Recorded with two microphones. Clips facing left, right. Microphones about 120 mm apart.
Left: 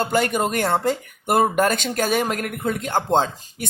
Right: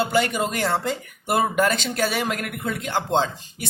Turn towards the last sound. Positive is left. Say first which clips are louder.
# left 2 dB
turn(degrees=50)  # may be behind; listen again after turning